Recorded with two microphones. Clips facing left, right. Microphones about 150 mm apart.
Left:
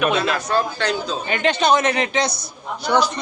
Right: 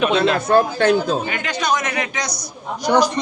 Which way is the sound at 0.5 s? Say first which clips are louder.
Right 8 dB; 50° right (ahead or behind).